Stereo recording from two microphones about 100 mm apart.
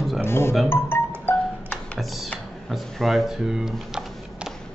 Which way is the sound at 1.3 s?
25° left (ahead or behind).